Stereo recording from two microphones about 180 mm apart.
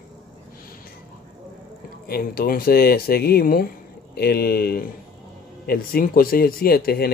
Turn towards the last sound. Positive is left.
turn(degrees=60)  # may be behind; listen again after turning